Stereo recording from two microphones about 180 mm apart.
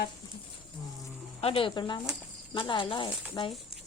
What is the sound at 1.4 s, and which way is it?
Speech, 30° left (ahead or behind).